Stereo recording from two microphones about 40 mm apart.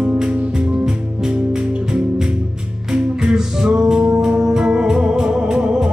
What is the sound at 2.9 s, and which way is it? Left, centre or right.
Music, centre.